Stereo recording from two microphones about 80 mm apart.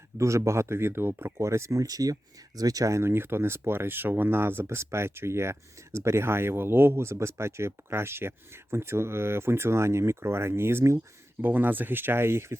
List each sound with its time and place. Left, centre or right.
0.2 s speech: right